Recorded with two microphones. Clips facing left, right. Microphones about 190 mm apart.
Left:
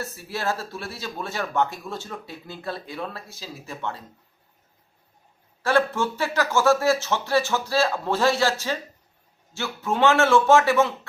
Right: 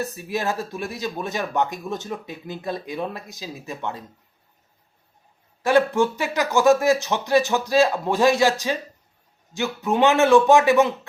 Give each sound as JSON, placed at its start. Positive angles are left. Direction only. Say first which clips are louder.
{"t": 0.0, "sound": "speech", "louder": "right 3 dB", "side_deg": -15}
{"t": 5.6, "sound": "speech", "louder": "right 4 dB", "side_deg": -15}